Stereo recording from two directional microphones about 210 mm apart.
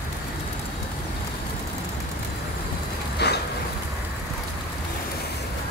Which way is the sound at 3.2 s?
50° left (ahead or behind).